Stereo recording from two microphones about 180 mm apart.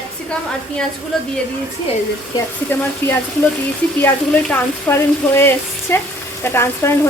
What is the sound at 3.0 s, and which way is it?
Speech, 10° left (ahead or behind).